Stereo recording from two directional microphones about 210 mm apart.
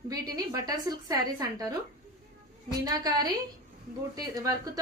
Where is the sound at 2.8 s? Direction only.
15° right (ahead or behind).